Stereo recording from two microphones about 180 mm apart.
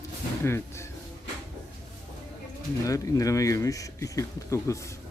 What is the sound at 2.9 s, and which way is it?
Speech, 20° left (ahead or behind).